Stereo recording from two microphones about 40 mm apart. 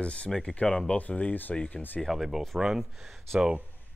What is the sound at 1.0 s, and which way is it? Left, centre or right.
Speech, left.